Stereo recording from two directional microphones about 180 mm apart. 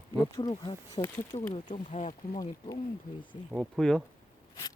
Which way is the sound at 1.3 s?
45° left (ahead or behind).